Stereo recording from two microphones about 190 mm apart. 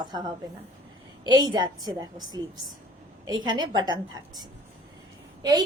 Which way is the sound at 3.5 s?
25° right (ahead or behind).